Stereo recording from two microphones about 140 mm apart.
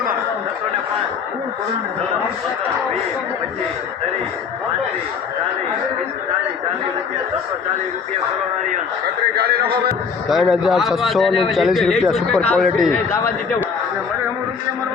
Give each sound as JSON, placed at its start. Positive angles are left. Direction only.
{"t": 10.2, "sound": "speech", "side_deg": 0}